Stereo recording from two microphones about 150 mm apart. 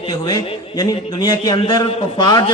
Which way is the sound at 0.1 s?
25° left (ahead or behind).